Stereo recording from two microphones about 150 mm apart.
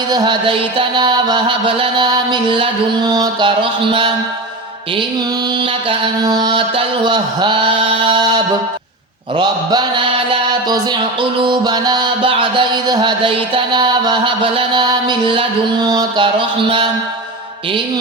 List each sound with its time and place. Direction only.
0.1 s music: 30° right (ahead or behind)
6.2 s mantra: 30° right (ahead or behind)
9.3 s mantra: 30° right (ahead or behind)
11.4 s music: 30° right (ahead or behind)